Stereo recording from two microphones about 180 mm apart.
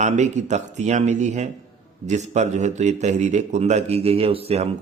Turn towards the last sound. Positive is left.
turn(degrees=-35)  # may be behind; listen again after turning